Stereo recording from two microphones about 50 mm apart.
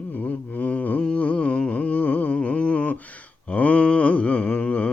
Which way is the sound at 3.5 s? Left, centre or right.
Left.